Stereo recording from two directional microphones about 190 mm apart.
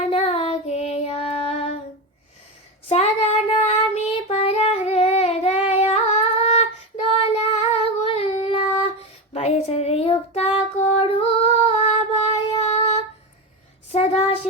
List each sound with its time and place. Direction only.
0.0 s child singing: 35° left (ahead or behind)
2.9 s child singing: 35° left (ahead or behind)
10.9 s female singing: 30° left (ahead or behind)
13.9 s a sound: 35° left (ahead or behind)